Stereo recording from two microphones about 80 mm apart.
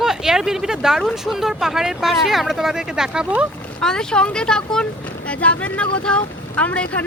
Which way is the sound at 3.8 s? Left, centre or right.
Centre.